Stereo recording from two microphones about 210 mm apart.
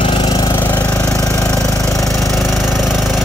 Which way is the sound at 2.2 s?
Centre (ahead or behind).